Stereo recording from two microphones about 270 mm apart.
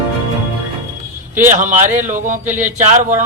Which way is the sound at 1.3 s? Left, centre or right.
Right.